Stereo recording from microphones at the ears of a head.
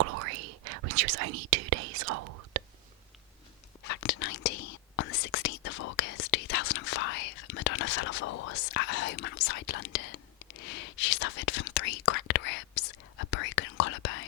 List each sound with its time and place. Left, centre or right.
0.0 s whispering: right
3.8 s whispering: left